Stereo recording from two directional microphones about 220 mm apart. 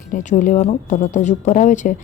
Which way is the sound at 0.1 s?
35° left (ahead or behind).